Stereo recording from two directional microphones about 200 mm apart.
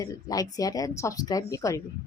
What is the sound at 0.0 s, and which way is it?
Speech, 20° left (ahead or behind).